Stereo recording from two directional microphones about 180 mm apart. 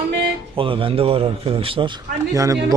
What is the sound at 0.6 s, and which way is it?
A man's voice, 30° right (ahead or behind).